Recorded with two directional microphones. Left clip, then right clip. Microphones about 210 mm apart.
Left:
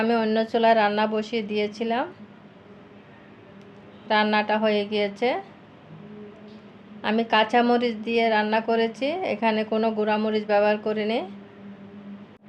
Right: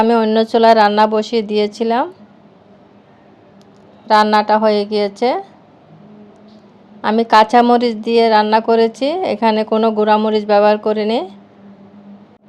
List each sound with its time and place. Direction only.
0.0 s speech: 35° right (ahead or behind)
4.1 s speech: 35° right (ahead or behind)
7.0 s speech: 35° right (ahead or behind)